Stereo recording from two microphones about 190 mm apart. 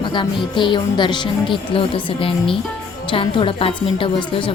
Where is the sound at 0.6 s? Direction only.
25° left (ahead or behind).